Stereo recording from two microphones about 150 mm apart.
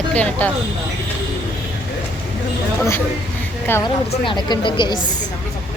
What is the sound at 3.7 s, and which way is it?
Speech, 15° left (ahead or behind).